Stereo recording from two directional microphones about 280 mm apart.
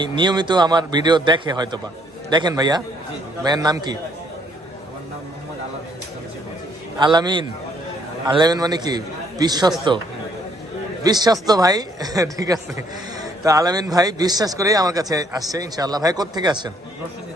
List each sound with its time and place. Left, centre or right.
0.0 s speech: centre
7.0 s a man's voice: centre
11.0 s speech: centre